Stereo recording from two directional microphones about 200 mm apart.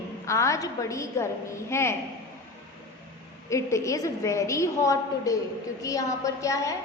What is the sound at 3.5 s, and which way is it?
A woman's voice, 15° left (ahead or behind).